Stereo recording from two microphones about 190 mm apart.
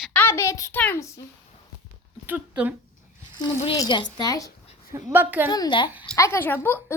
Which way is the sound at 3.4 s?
20° left (ahead or behind).